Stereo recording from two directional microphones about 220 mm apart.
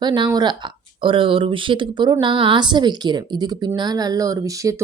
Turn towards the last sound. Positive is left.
turn(degrees=-15)  # may be behind; listen again after turning